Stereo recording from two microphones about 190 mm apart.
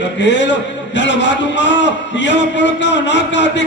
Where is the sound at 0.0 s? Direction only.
70° left (ahead or behind).